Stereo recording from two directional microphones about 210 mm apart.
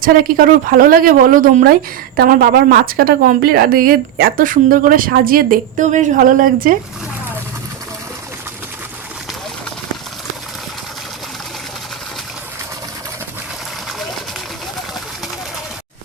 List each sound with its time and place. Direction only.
0.0 s a woman's voice: 45° right (ahead or behind)